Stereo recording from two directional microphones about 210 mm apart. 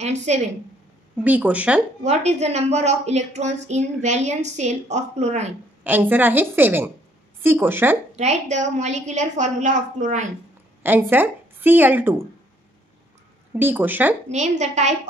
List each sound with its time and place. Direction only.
0.3 s a woman's voice: 35° right (ahead or behind)
1.2 s a woman's voice: 5° right (ahead or behind)
2.0 s a woman's voice: 30° right (ahead or behind)
5.9 s a woman's voice: 10° right (ahead or behind)
8.2 s a woman's voice: 35° right (ahead or behind)
10.8 s a woman's voice: 10° right (ahead or behind)
13.6 s a woman's voice: 10° right (ahead or behind)
14.6 s a woman's voice: 35° right (ahead or behind)